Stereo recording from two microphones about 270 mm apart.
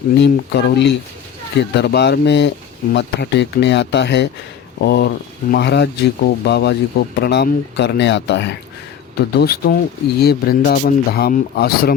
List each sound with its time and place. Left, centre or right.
0.2 s speech: left